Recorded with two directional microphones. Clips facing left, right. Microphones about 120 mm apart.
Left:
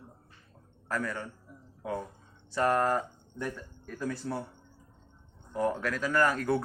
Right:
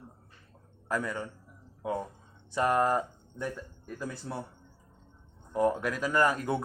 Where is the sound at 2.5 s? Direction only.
15° right (ahead or behind).